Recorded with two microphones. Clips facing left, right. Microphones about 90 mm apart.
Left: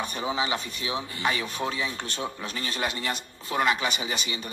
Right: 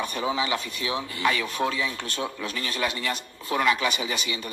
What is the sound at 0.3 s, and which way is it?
Speech, 25° left (ahead or behind).